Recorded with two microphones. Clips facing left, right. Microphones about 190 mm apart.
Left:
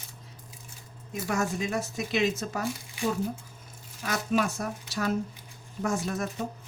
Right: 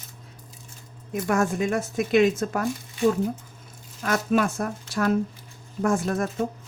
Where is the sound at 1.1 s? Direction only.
55° right (ahead or behind).